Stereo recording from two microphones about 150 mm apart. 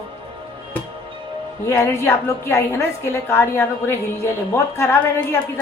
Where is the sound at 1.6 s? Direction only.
20° left (ahead or behind).